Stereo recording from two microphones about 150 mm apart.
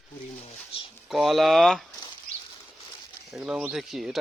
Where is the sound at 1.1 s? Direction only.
Centre (ahead or behind).